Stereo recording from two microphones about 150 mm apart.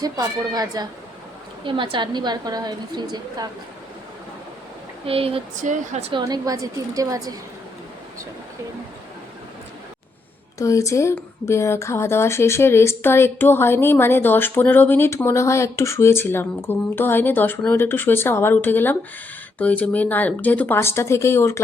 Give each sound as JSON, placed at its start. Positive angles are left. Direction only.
{"t": 0.0, "sound": "a woman's voice", "side_deg": -25}
{"t": 5.0, "sound": "a sound", "side_deg": -40}
{"t": 5.6, "sound": "speech", "side_deg": -50}
{"t": 6.1, "sound": "a woman's voice", "side_deg": -30}
{"t": 10.6, "sound": "a woman's voice", "side_deg": 20}